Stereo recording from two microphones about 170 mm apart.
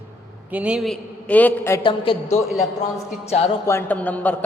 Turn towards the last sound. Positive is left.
turn(degrees=10)  # may be behind; listen again after turning